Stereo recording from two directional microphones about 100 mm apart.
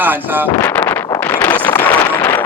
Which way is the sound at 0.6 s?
20° left (ahead or behind).